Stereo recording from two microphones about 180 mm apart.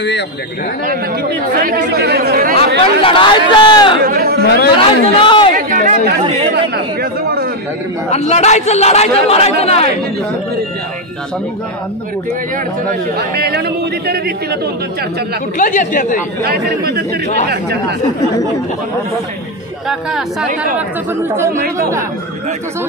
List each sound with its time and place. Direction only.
1.5 s speech: 55° right (ahead or behind)
2.8 s speech: 30° left (ahead or behind)
4.0 s speech: 55° right (ahead or behind)
4.7 s speech: 30° left (ahead or behind)
5.5 s a sound: 45° right (ahead or behind)
6.5 s speech: 60° right (ahead or behind)
8.1 s a man's voice: 35° left (ahead or behind)
13.2 s speech: 60° right (ahead or behind)
15.5 s speech: 45° left (ahead or behind)
16.4 s speech: 60° right (ahead or behind)
19.9 s speech: centre (ahead or behind)
20.7 s speech: 15° right (ahead or behind)